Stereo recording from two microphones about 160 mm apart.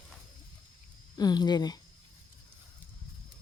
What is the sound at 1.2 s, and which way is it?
Speech, 25° left (ahead or behind).